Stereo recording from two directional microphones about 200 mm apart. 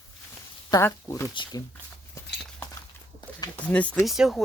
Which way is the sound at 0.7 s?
15° left (ahead or behind).